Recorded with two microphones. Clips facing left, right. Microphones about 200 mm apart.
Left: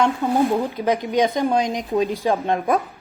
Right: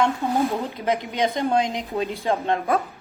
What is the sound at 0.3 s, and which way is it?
A woman's voice, 15° left (ahead or behind).